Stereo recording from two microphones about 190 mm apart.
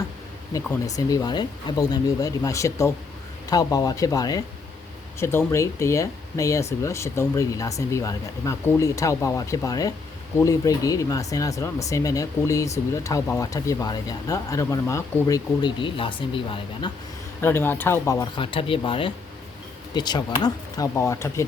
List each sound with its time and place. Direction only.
0.5 s speech: 20° left (ahead or behind)
17.4 s speech: 10° left (ahead or behind)